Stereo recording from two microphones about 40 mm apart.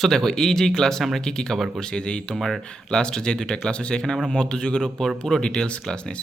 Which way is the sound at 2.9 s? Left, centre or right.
Left.